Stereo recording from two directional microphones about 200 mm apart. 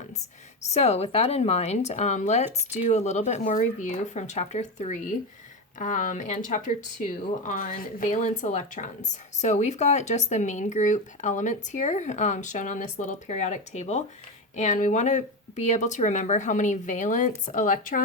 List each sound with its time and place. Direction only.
0.6 s speech: 35° left (ahead or behind)